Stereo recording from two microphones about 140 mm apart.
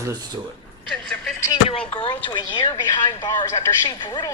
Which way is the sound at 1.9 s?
35° left (ahead or behind).